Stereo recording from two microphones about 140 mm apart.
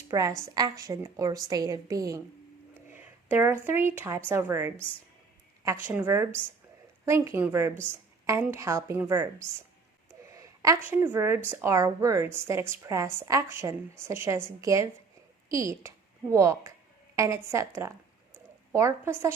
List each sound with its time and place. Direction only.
0.1 s a woman's voice: 25° right (ahead or behind)
10.3 s a sound: 25° right (ahead or behind)
10.8 s a woman's voice: 15° right (ahead or behind)